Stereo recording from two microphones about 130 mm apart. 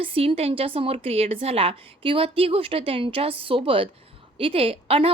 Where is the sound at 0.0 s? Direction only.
45° right (ahead or behind).